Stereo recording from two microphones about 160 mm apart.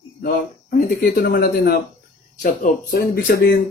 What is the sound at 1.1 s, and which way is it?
Speech, 75° left (ahead or behind).